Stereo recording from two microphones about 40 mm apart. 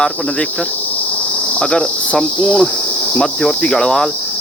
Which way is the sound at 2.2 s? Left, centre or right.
Centre.